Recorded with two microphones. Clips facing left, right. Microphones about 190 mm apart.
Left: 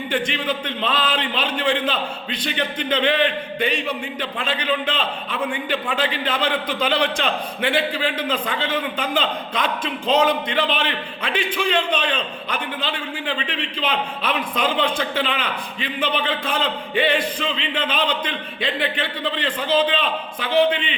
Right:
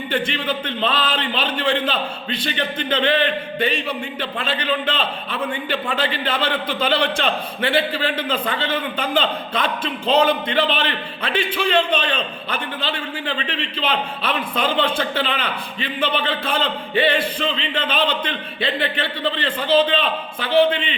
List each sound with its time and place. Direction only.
0.1 s a man's voice: 10° left (ahead or behind)
4.4 s a man's voice: 10° left (ahead or behind)
13.2 s a man's voice: 10° left (ahead or behind)